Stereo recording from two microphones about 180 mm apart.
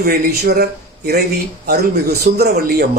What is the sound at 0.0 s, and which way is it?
Speech, 60° right (ahead or behind).